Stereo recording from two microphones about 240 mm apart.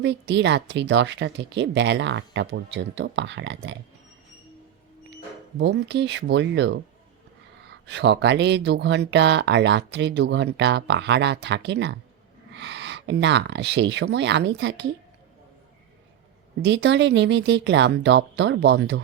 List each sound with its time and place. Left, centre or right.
0.0 s speech: right
5.5 s speech: right
7.9 s speech: right
16.6 s speech: right